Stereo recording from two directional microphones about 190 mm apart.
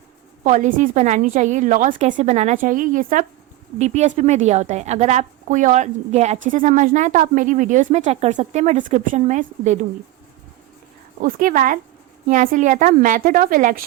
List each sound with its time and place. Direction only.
0.4 s speech: 40° right (ahead or behind)
11.2 s a woman's voice: 45° right (ahead or behind)